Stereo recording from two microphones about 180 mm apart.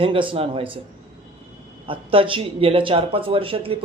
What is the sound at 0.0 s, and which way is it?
Speech, 30° right (ahead or behind).